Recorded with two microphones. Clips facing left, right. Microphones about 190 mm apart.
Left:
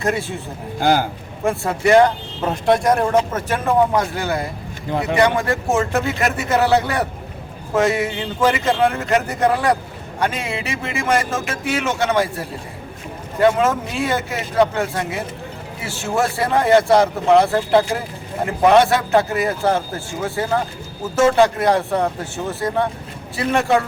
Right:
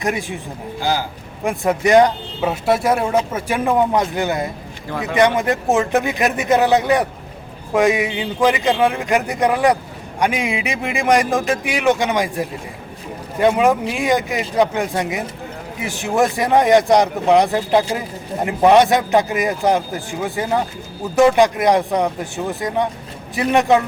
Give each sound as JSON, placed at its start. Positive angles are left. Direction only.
{"t": 0.0, "sound": "a man's voice", "side_deg": -15}
{"t": 0.8, "sound": "a man's voice", "side_deg": 55}
{"t": 1.5, "sound": "a man's voice", "side_deg": -15}
{"t": 2.4, "sound": "a man's voice", "side_deg": -5}